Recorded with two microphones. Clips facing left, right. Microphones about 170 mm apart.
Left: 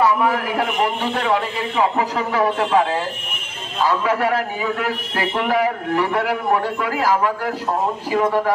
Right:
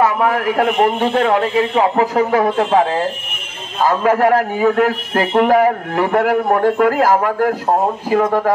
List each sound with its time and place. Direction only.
0.0 s a man's voice: 50° right (ahead or behind)
3.8 s a man's voice: 50° right (ahead or behind)